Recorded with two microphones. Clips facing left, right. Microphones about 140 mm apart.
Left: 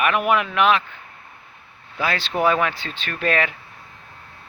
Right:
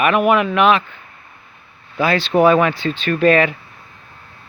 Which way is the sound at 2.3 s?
60° right (ahead or behind).